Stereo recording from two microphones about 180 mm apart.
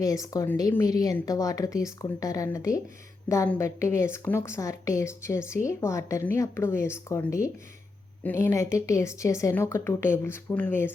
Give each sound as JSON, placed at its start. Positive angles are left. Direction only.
{"t": 0.0, "sound": "a woman's voice", "side_deg": 20}